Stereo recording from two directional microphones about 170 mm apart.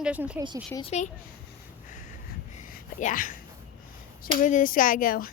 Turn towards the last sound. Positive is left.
turn(degrees=60)  # may be behind; listen again after turning